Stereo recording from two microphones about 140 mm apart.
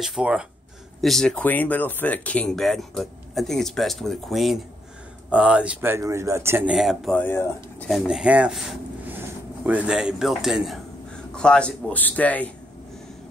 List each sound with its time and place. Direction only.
0.0 s speech: 5° right (ahead or behind)
6.7 s speech: centre (ahead or behind)
7.2 s speech: 15° left (ahead or behind)
7.9 s speech: 5° right (ahead or behind); by 12.4 s 10° left (ahead or behind)